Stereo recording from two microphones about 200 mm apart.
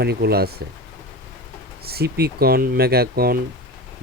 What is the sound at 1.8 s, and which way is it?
Speech, 50° right (ahead or behind).